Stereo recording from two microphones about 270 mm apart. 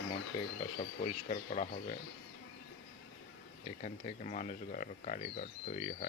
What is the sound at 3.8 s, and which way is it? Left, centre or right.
Speech, left.